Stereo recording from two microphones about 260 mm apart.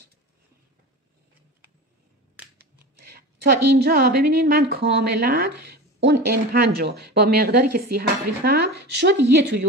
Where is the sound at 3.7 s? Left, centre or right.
Right.